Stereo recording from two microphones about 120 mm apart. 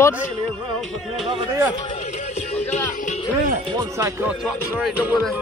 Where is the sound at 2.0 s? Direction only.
65° left (ahead or behind).